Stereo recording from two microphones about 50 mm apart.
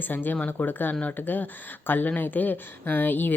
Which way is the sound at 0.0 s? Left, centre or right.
Left.